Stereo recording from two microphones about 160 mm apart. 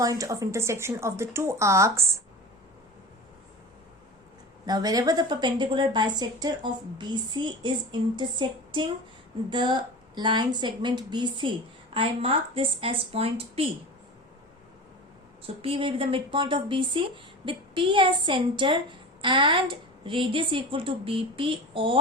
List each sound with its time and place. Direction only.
0.0 s speech: 20° right (ahead or behind)
4.6 s a woman's voice: 25° right (ahead or behind)
15.4 s speech: 35° right (ahead or behind)